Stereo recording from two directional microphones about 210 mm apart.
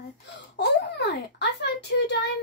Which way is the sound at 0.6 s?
55° left (ahead or behind).